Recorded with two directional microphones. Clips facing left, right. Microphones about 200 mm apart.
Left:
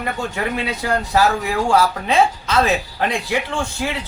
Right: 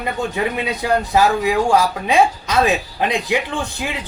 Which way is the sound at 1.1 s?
15° right (ahead or behind).